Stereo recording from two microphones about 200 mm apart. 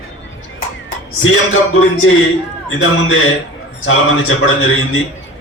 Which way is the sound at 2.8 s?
90° left.